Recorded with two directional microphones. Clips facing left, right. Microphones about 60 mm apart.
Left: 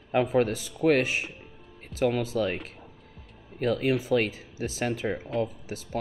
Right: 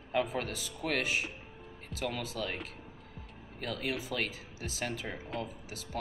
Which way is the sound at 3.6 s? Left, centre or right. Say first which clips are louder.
Left 11 dB; left.